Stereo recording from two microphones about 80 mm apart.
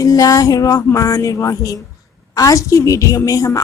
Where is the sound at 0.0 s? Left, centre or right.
Left.